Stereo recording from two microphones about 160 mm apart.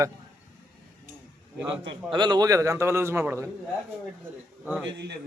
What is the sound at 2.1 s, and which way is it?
A man's voice, 30° right (ahead or behind).